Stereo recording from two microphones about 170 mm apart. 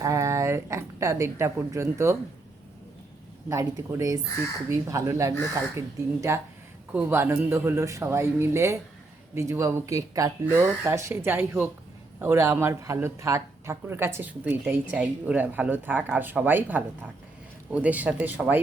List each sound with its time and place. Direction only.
0.0 s speech: 20° right (ahead or behind)
3.5 s speech: 20° right (ahead or behind)